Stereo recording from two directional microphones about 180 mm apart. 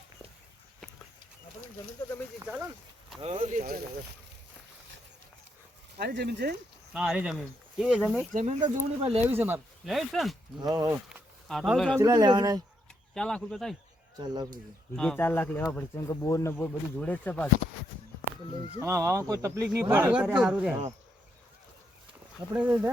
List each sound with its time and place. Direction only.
2.4 s speech: 10° right (ahead or behind)
3.2 s speech: 35° right (ahead or behind)
6.0 s speech: 60° right (ahead or behind)
6.9 s speech: 5° right (ahead or behind)
8.3 s speech: 45° right (ahead or behind)
8.6 s speech: 35° right (ahead or behind)
9.2 s speech: 10° right (ahead or behind)
10.6 s speech: 20° right (ahead or behind)
11.1 s a sound: centre (ahead or behind)
11.9 s speech: 20° right (ahead or behind)
13.1 s speech: 5° left (ahead or behind)
14.9 s speech: 5° left (ahead or behind)
18.8 s speech: 15° right (ahead or behind)
22.5 s speech: 10° right (ahead or behind)